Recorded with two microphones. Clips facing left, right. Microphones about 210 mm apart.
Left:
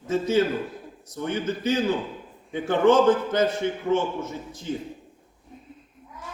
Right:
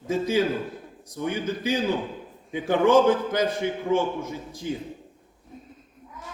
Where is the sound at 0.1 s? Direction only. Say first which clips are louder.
Left 1 dB; 10° right (ahead or behind).